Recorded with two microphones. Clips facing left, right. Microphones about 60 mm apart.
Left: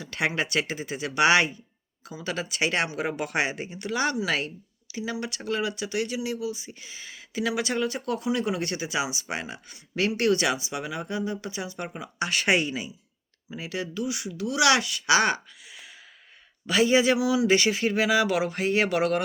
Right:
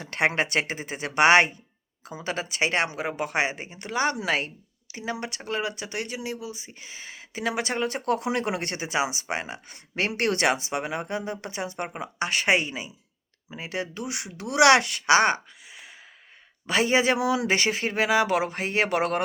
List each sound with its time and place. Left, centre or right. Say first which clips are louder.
0.0 s speech: right 3 dB; right
14.0 s speech: left 4 dB; right